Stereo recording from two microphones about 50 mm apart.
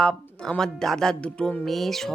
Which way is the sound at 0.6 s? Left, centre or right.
Centre.